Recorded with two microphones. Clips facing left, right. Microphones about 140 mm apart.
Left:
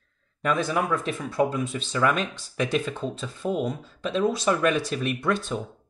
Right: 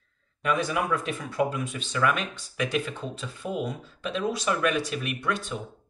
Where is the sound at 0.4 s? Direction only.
35° left (ahead or behind).